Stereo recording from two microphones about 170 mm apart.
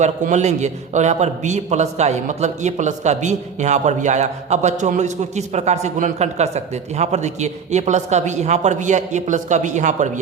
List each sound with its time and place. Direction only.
0.0 s a man's voice: 45° right (ahead or behind)